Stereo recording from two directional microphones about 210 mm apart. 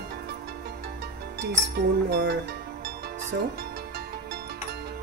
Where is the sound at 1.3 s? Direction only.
55° right (ahead or behind).